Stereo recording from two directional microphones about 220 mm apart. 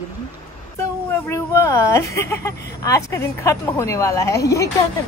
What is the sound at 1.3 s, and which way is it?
Speech, 15° left (ahead or behind).